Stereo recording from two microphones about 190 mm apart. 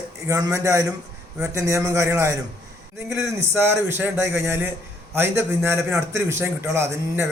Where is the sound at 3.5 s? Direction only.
10° right (ahead or behind).